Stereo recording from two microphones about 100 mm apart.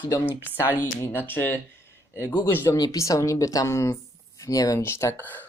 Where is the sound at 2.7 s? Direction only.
35° left (ahead or behind).